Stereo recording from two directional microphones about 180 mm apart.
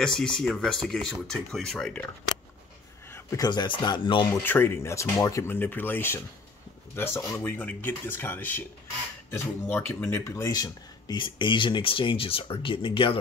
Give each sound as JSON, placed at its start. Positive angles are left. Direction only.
{"t": 0.0, "sound": "speech", "side_deg": 5}
{"t": 3.1, "sound": "speech", "side_deg": 15}
{"t": 4.4, "sound": "speech", "side_deg": 10}
{"t": 9.7, "sound": "speech", "side_deg": 10}